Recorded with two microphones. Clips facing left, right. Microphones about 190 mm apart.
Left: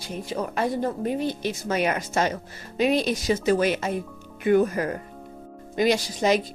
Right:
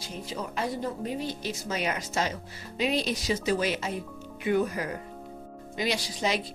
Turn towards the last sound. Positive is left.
turn(degrees=50)  # may be behind; listen again after turning